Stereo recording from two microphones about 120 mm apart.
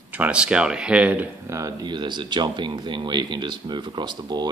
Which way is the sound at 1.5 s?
25° right (ahead or behind).